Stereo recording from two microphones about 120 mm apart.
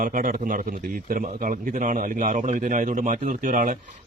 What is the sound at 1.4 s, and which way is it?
A man's voice, 90° right.